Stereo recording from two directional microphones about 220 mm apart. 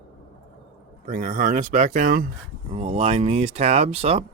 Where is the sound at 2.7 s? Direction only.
30° right (ahead or behind).